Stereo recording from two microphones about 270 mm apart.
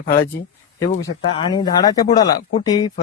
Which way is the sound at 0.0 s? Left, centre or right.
Left.